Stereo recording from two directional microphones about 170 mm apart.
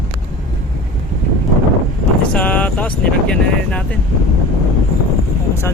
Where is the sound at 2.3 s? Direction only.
10° left (ahead or behind).